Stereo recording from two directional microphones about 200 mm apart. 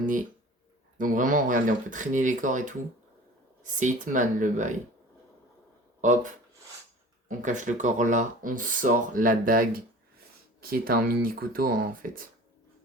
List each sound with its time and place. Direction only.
0.9 s speech: 40° right (ahead or behind)
6.0 s speech: 40° right (ahead or behind)